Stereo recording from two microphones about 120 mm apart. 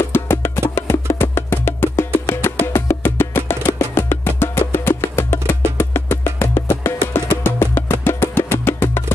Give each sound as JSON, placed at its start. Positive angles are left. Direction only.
{"t": 0.1, "sound": "music", "side_deg": 20}